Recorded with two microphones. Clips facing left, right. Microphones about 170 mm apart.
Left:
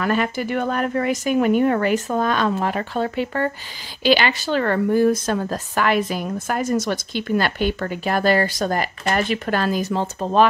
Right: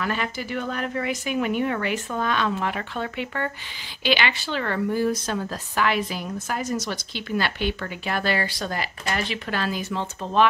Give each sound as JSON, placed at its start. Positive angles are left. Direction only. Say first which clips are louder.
{"t": 0.0, "sound": "speech", "louder": "left 7 dB", "side_deg": 50}